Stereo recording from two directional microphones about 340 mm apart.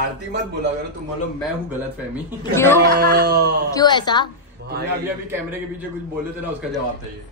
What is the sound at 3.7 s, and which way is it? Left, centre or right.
Speech, centre.